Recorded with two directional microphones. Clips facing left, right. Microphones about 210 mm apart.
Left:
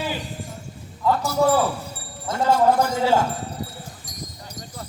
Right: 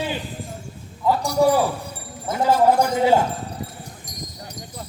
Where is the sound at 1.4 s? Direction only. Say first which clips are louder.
Right 2 dB; 15° right (ahead or behind).